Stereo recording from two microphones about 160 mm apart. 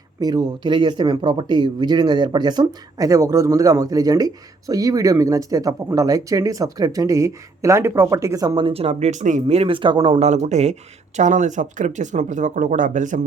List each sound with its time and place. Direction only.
0.2 s speech: 25° right (ahead or behind); by 13.2 s 50° right (ahead or behind)